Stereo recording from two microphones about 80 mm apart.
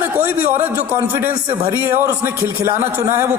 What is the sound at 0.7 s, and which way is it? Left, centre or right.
Speech, right.